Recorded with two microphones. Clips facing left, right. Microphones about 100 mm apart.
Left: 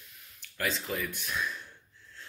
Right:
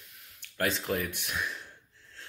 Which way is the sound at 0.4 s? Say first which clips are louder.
Right 3 dB; 60° right (ahead or behind).